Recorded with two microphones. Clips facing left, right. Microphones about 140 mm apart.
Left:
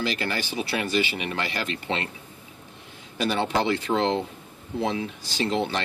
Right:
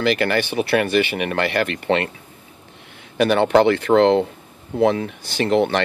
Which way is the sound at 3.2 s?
65° right (ahead or behind).